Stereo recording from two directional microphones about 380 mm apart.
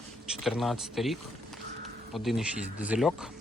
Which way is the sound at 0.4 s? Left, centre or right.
Centre.